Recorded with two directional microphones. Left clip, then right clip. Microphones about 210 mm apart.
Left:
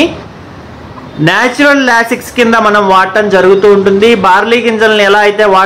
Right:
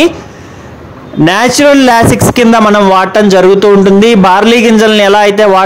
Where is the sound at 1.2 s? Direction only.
45° right (ahead or behind).